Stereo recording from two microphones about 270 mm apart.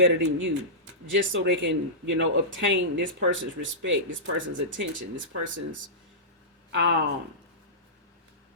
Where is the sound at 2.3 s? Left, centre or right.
Right.